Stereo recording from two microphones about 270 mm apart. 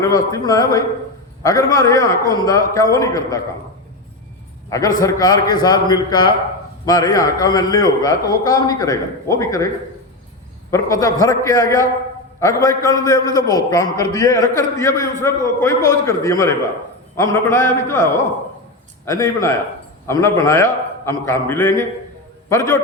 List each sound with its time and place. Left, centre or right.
0.0 s a man's voice: centre
4.7 s a man's voice: centre
10.7 s a man's voice: centre
19.0 s a man's voice: centre